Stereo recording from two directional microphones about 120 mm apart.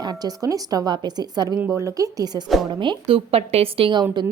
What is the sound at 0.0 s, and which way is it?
A woman's voice, 35° right (ahead or behind).